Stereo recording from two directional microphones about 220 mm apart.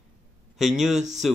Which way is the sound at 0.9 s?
30° right (ahead or behind).